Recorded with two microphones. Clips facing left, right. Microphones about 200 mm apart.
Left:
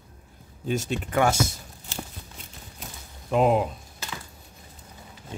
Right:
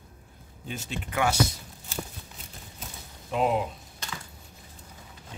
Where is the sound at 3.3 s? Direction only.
50° left (ahead or behind).